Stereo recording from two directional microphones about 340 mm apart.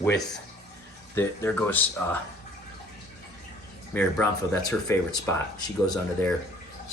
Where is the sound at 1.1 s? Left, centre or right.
Centre.